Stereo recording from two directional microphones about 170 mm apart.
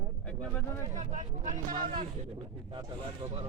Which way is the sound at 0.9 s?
45° right (ahead or behind).